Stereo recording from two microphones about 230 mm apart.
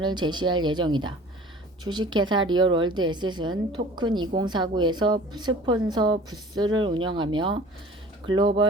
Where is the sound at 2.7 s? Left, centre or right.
Right.